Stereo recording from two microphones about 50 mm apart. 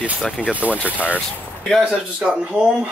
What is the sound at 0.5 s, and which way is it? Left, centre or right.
Speech, right.